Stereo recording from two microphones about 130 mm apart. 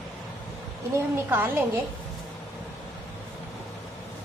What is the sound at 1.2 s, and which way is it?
Speech, 15° right (ahead or behind).